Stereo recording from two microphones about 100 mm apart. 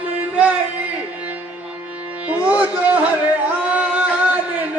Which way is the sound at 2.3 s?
15° right (ahead or behind).